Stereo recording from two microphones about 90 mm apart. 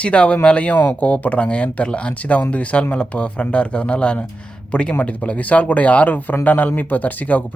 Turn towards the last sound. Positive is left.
turn(degrees=20)  # may be behind; listen again after turning